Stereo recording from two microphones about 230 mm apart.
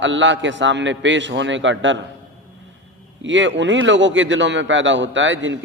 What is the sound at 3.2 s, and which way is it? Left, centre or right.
A man's voice, right.